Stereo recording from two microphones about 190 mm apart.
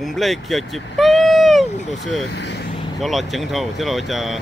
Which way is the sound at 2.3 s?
65° left (ahead or behind).